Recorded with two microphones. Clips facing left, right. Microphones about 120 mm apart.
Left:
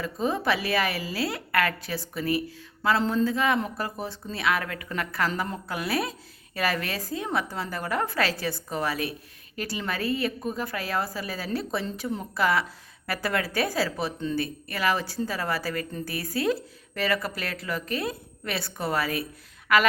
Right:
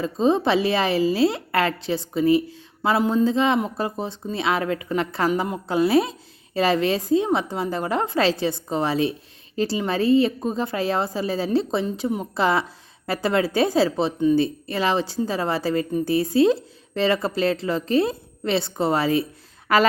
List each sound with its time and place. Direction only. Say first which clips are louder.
0.0 s a woman's voice: right 7 dB; 25° right (ahead or behind)